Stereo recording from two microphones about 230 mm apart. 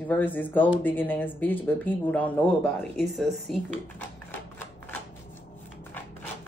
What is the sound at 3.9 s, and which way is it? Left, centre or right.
Typewriter, centre.